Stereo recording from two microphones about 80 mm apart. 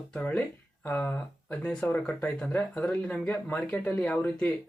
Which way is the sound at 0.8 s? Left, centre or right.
Left.